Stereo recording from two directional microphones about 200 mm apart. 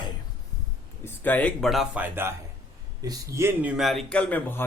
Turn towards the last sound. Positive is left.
turn(degrees=10)  # may be behind; listen again after turning